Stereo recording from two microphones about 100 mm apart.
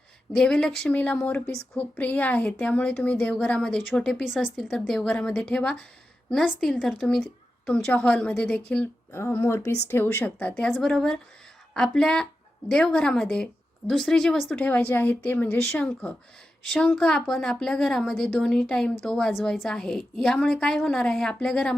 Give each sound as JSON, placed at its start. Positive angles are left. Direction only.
{"t": 0.3, "sound": "a woman's voice", "side_deg": 10}
{"t": 10.6, "sound": "a woman's voice", "side_deg": 5}
{"t": 14.5, "sound": "a woman's voice", "side_deg": 15}